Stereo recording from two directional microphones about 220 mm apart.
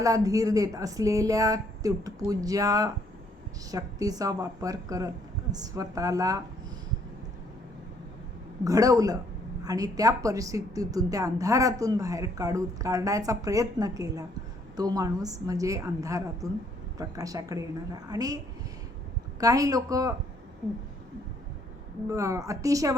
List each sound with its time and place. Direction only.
0.0 s a woman's voice: 15° right (ahead or behind)
8.6 s a woman's voice: 15° right (ahead or behind)
19.4 s a woman's voice: 15° right (ahead or behind)
22.1 s a woman's voice: 15° right (ahead or behind)